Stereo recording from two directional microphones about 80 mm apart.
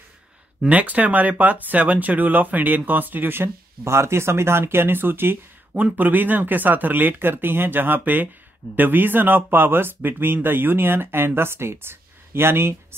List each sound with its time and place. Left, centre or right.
0.7 s speech: centre